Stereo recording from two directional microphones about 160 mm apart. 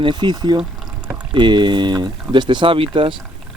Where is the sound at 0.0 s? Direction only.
30° right (ahead or behind).